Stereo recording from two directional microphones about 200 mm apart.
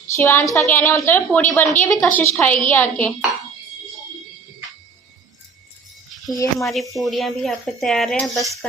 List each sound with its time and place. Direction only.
0.2 s a woman's voice: 10° left (ahead or behind)
6.3 s a woman's voice: 15° left (ahead or behind)
6.7 s speech: centre (ahead or behind)